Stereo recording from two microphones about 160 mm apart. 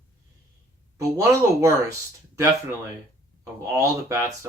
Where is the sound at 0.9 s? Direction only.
20° right (ahead or behind).